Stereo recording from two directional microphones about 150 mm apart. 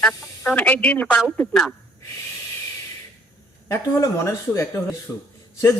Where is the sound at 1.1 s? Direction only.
Centre (ahead or behind).